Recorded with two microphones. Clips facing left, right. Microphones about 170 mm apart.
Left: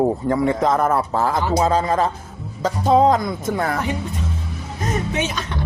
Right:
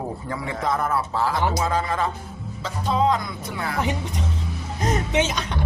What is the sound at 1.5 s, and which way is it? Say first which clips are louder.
A man's voice: left 6 dB; 30° left (ahead or behind).